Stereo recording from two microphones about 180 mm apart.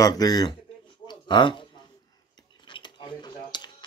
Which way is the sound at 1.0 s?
25° left (ahead or behind).